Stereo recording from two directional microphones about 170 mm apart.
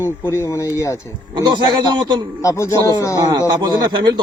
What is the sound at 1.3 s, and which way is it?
Speech, 25° right (ahead or behind).